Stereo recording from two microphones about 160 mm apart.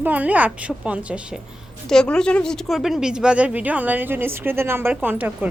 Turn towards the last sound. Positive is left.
turn(degrees=-10)  # may be behind; listen again after turning